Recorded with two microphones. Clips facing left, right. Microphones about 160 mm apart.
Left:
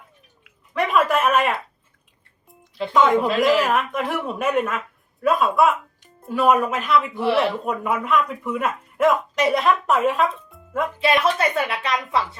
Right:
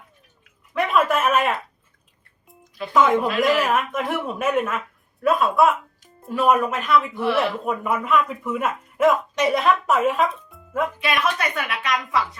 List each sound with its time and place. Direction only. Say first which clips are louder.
0.7 s speech: left 1 dB; centre (ahead or behind)
2.9 s speech: left 1 dB; centre (ahead or behind)
11.0 s a woman's voice: left 8 dB; 30° left (ahead or behind)